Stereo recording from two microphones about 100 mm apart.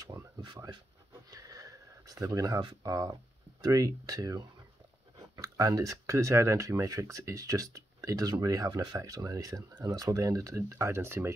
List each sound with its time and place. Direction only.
0.0 s speech: 30° right (ahead or behind)
0.4 s speech: 45° right (ahead or behind)
1.3 s a sound: 35° right (ahead or behind)
3.6 s speech: 35° right (ahead or behind)